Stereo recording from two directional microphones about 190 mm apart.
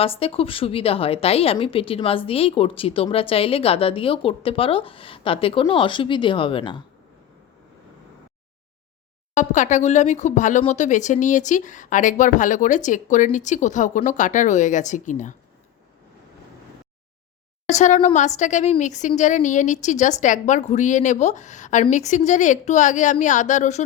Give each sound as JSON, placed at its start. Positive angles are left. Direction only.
{"t": 0.0, "sound": "a woman's voice", "side_deg": 30}
{"t": 9.3, "sound": "speech", "side_deg": 40}
{"t": 17.7, "sound": "speech", "side_deg": 40}